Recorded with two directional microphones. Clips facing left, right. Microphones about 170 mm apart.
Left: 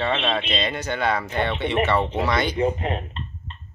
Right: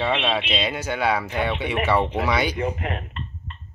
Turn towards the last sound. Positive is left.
turn(degrees=25)  # may be behind; listen again after turning